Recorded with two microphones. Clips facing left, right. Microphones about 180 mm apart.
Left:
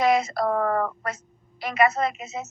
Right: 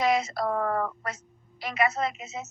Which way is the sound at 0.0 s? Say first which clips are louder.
Left 4 dB; 55° left (ahead or behind).